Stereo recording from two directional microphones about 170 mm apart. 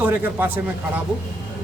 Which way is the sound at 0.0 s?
10° right (ahead or behind).